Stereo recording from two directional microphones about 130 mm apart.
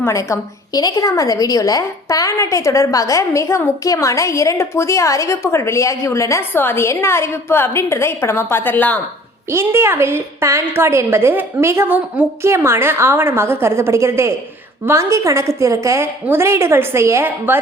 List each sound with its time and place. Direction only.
0.0 s a woman's voice: 20° left (ahead or behind)
9.5 s a woman's voice: 20° right (ahead or behind)